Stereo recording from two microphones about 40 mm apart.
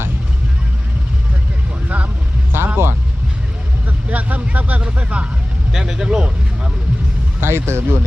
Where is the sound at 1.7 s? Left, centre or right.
Right.